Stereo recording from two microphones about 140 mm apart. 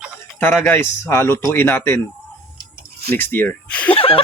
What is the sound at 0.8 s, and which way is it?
Speech, 15° left (ahead or behind).